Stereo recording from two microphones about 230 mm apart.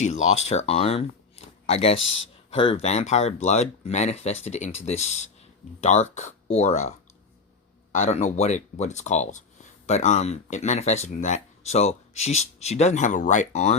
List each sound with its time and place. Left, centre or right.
0.3 s speech: left
7.9 s speech: left